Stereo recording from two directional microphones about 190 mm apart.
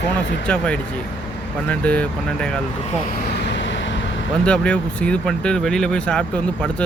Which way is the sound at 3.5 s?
70° left (ahead or behind).